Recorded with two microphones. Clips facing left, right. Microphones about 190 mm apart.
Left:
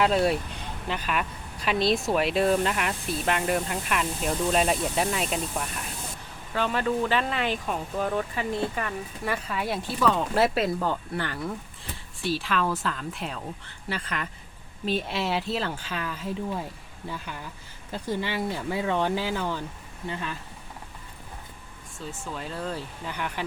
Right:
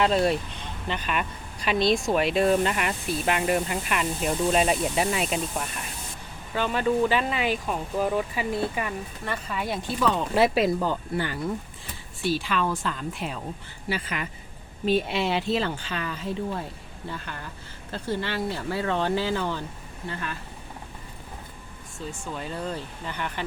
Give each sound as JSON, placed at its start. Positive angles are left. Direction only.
{"t": 0.0, "sound": "speech", "side_deg": 5}
{"t": 9.2, "sound": "speech", "side_deg": 5}
{"t": 21.9, "sound": "speech", "side_deg": 0}